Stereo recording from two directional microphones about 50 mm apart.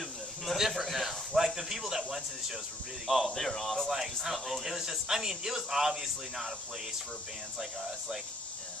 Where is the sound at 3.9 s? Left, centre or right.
Centre.